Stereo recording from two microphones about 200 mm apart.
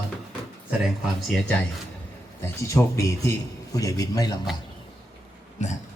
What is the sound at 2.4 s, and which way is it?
Speech, 15° left (ahead or behind).